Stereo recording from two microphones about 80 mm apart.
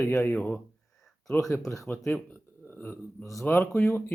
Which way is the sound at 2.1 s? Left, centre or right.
Left.